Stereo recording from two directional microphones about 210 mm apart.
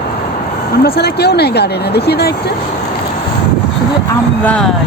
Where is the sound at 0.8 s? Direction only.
50° left (ahead or behind).